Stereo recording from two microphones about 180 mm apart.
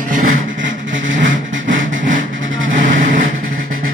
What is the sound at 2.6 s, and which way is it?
Vehicle, 90° right.